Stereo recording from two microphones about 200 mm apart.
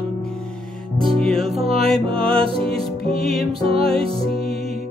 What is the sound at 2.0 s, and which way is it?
Music, 25° right (ahead or behind).